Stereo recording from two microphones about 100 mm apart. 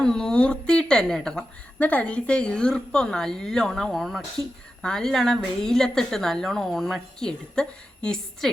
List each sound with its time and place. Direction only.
0.0 s a woman's voice: 5° left (ahead or behind)